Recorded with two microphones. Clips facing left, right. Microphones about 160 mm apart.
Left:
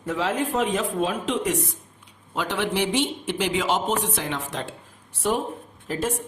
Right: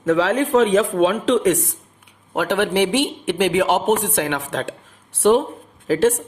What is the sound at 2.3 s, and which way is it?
A man's voice, 65° right (ahead or behind).